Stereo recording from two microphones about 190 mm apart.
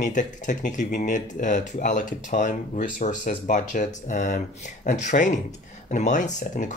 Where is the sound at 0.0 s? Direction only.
40° left (ahead or behind).